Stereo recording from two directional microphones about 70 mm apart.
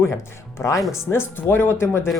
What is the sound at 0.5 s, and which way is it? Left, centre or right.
Speech, left.